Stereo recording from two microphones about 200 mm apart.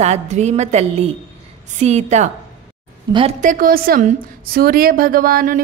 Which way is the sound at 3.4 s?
40° right (ahead or behind).